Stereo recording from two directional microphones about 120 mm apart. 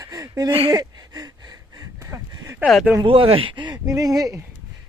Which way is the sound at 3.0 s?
45° right (ahead or behind).